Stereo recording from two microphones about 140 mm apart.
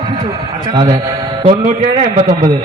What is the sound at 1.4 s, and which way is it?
A man's voice, 45° right (ahead or behind).